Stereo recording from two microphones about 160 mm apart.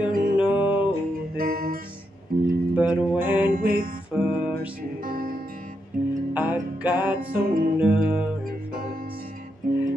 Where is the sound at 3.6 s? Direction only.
65° right (ahead or behind).